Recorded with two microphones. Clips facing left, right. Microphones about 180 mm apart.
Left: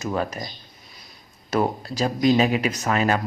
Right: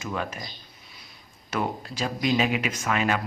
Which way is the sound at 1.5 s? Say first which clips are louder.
Left 6 dB; 35° left (ahead or behind).